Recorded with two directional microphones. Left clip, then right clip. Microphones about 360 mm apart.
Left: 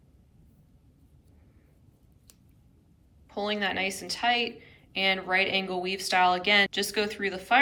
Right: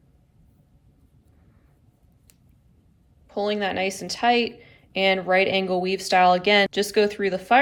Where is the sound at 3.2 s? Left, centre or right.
Centre.